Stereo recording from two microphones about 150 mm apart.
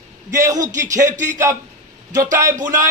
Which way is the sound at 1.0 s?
55° right (ahead or behind).